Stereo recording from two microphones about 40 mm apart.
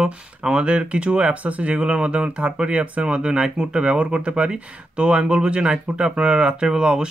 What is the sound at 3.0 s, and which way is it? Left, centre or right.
Speech, right.